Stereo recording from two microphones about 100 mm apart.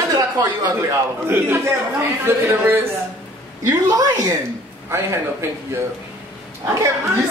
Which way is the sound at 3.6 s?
35° right (ahead or behind).